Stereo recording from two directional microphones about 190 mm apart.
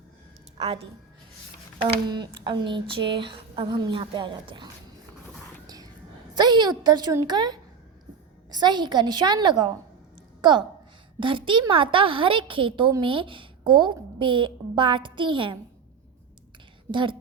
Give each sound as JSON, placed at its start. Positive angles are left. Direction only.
{"t": 0.5, "sound": "a woman's voice", "side_deg": -30}
{"t": 6.3, "sound": "a woman's voice", "side_deg": -20}
{"t": 11.2, "sound": "a woman's voice", "side_deg": -25}
{"t": 16.9, "sound": "a woman's voice", "side_deg": -25}